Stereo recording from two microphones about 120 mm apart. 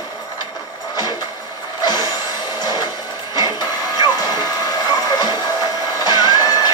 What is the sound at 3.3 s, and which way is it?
Music, 35° left (ahead or behind).